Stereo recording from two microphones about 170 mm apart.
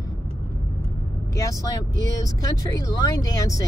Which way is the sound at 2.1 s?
20° left (ahead or behind).